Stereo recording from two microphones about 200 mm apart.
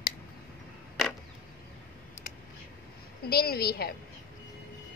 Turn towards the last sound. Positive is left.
turn(degrees=50)  # may be behind; listen again after turning